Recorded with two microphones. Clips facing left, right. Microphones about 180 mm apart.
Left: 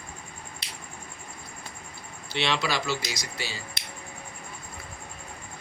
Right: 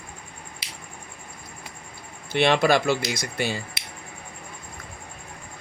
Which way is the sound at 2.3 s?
50° right (ahead or behind).